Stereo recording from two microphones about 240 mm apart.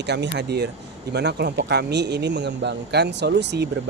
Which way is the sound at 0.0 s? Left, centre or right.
Right.